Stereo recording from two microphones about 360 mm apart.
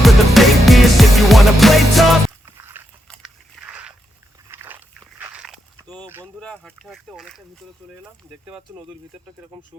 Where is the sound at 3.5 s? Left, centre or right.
Centre.